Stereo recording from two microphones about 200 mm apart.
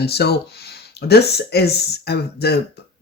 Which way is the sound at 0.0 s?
55° left (ahead or behind).